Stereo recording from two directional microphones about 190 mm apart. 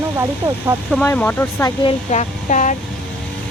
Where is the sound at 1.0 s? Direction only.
10° left (ahead or behind).